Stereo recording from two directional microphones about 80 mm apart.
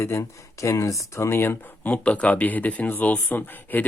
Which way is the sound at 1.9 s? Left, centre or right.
Centre.